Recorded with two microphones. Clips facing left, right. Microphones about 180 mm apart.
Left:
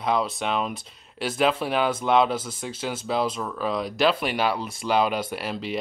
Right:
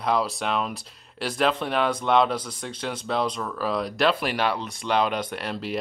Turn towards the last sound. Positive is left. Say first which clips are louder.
# left 1 dB
turn(degrees=0)  # may be behind; listen again after turning